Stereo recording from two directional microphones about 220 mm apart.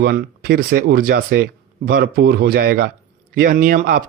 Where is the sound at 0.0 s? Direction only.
45° right (ahead or behind).